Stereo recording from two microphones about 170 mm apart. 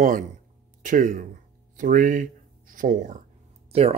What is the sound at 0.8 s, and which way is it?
Speech, 50° right (ahead or behind).